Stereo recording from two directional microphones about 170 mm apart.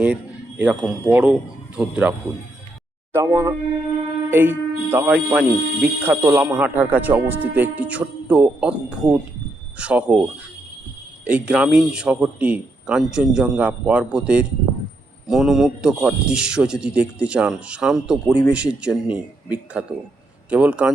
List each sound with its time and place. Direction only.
0.6 s a man's voice: 5° right (ahead or behind)
11.3 s a man's voice: 5° right (ahead or behind)